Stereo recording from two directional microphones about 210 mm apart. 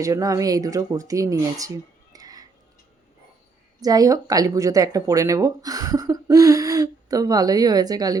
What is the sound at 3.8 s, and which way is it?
Speech, 15° right (ahead or behind).